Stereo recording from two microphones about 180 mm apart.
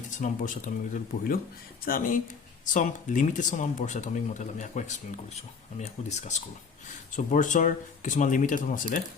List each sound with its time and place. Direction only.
0.2 s speech: 45° left (ahead or behind)